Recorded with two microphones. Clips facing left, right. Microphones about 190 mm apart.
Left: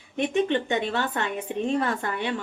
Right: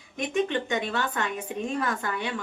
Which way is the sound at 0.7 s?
35° left (ahead or behind).